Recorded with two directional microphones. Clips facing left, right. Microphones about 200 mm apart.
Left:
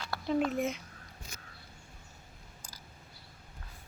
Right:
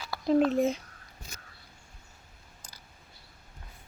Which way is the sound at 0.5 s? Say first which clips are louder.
Right 6 dB; 35° right (ahead or behind).